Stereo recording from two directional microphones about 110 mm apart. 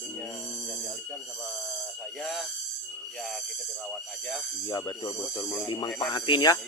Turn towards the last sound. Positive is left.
turn(degrees=40)  # may be behind; listen again after turning